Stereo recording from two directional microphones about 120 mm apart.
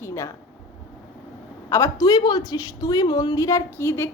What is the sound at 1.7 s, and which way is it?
A woman's voice, 25° left (ahead or behind).